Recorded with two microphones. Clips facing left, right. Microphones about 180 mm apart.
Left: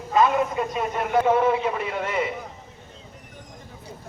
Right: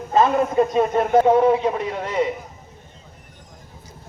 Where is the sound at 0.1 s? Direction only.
40° right (ahead or behind).